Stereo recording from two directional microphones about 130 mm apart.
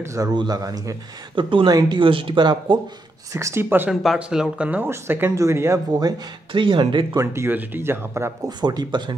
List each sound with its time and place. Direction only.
0.0 s speech: 20° right (ahead or behind)
1.3 s speech: 40° right (ahead or behind)
3.3 s speech: 25° right (ahead or behind)
3.9 s speech: centre (ahead or behind); by 5.8 s 20° right (ahead or behind)
5.9 s speech: 30° right (ahead or behind)
7.2 s speech: 20° right (ahead or behind)
8.5 s speech: 35° right (ahead or behind)